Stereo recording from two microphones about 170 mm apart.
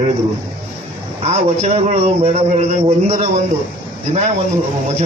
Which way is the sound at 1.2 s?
40° right (ahead or behind).